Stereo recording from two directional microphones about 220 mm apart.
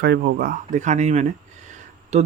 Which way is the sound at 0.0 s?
50° right (ahead or behind).